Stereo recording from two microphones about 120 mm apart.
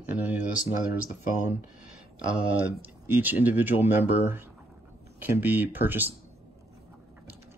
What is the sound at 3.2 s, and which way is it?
Speech, 15° right (ahead or behind).